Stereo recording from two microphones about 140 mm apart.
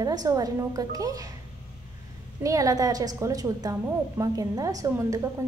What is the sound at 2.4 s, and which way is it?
A woman's voice, 25° right (ahead or behind).